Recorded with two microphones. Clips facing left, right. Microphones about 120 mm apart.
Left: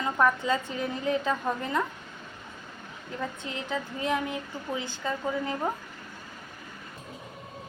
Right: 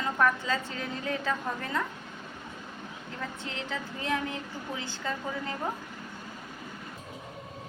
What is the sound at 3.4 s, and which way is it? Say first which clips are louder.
A woman's voice: left 3 dB; 15° left (ahead or behind).